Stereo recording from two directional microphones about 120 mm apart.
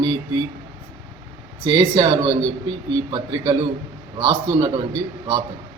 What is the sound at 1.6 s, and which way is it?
A man's voice, 40° right (ahead or behind).